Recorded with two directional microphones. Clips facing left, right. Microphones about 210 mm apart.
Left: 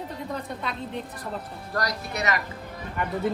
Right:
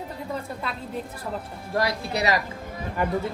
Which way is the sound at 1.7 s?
35° right (ahead or behind).